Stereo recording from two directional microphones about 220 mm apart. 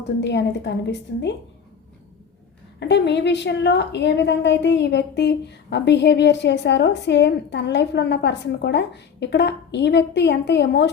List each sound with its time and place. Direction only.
0.2 s a woman's voice: 50° left (ahead or behind)
2.8 s a woman's voice: 50° left (ahead or behind)